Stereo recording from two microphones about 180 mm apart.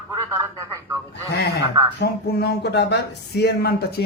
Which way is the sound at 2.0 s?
65° left (ahead or behind).